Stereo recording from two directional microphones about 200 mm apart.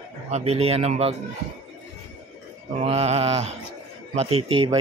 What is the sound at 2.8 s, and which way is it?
Speech, 30° right (ahead or behind).